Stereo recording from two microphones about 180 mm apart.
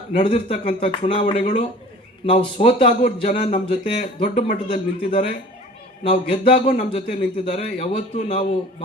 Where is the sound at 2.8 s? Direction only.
50° left (ahead or behind).